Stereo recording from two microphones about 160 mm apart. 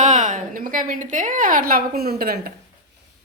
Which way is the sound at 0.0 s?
50° right (ahead or behind).